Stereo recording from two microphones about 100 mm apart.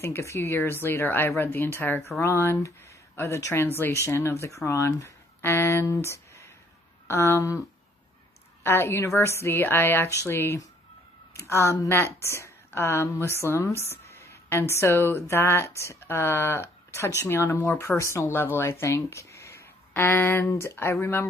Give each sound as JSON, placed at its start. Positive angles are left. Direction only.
{"t": 0.0, "sound": "a woman's voice", "side_deg": 30}
{"t": 5.9, "sound": "a sound", "side_deg": 30}
{"t": 7.1, "sound": "a woman's voice", "side_deg": 25}
{"t": 8.6, "sound": "a woman's voice", "side_deg": 25}